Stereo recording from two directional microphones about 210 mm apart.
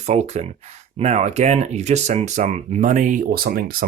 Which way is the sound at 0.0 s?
30° right (ahead or behind).